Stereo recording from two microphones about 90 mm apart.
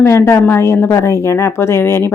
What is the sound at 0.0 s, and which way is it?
Speech, 30° left (ahead or behind).